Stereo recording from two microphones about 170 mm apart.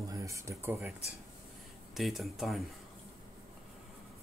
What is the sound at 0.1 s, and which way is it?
Speech, 20° right (ahead or behind).